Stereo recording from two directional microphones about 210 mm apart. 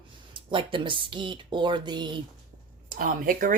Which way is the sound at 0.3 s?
25° right (ahead or behind).